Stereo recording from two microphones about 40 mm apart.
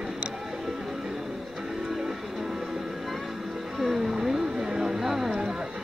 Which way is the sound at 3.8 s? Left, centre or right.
Centre.